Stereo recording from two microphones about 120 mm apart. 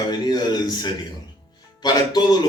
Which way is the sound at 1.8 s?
35° left (ahead or behind).